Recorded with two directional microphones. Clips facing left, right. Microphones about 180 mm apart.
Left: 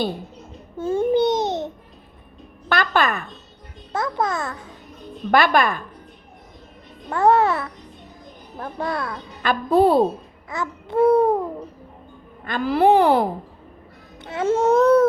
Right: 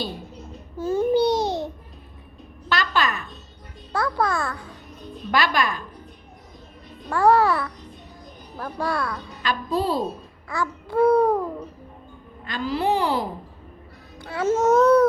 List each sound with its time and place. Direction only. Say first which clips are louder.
0.8 s speech: left 1 dB; 25° left (ahead or behind)
1.1 s babbling: left 1 dB; 20° left (ahead or behind)
2.6 s music: left 3 dB; 55° left (ahead or behind)
3.9 s speech: even; 20° left (ahead or behind)
5.3 s speech: left 5 dB; 55° left (ahead or behind)
7.1 s speech: left 1 dB; 20° left (ahead or behind)
9.4 s speech: left 8 dB; 55° left (ahead or behind)
10.5 s speech: left 1 dB; 20° left (ahead or behind)
12.5 s speech: left 7 dB; 55° left (ahead or behind)
14.2 s speech: left 1 dB; 25° left (ahead or behind)